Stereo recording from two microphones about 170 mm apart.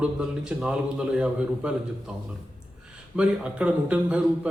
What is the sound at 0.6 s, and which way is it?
A man's voice, 5° right (ahead or behind).